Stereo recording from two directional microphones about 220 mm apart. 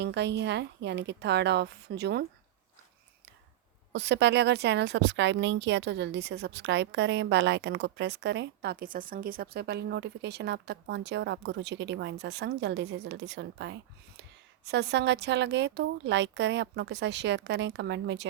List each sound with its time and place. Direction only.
0.0 s speech: 50° right (ahead or behind)
3.9 s speech: 50° right (ahead or behind)